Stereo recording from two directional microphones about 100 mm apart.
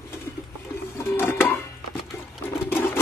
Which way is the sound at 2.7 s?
25° left (ahead or behind).